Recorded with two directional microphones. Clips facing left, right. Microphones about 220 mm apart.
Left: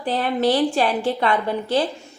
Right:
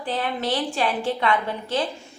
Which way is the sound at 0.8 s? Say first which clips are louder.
Left 3 dB; 35° left (ahead or behind).